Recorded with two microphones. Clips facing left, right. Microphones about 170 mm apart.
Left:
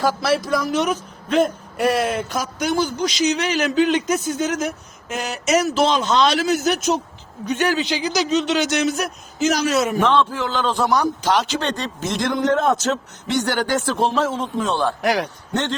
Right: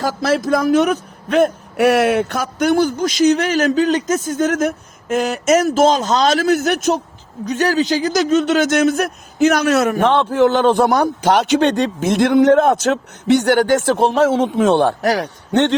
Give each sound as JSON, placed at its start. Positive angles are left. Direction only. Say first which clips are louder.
{"t": 0.0, "sound": "a man's voice", "louder": "right 2 dB", "side_deg": -45}
{"t": 7.4, "sound": "a man's voice", "louder": "right 4 dB", "side_deg": -35}
{"t": 15.0, "sound": "a man's voice", "louder": "right 3 dB", "side_deg": -40}